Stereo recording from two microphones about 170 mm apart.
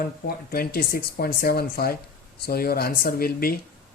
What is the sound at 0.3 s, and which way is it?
Speech, 65° left (ahead or behind).